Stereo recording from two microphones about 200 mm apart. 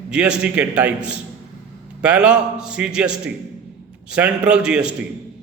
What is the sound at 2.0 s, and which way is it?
A man's voice, 5° right (ahead or behind).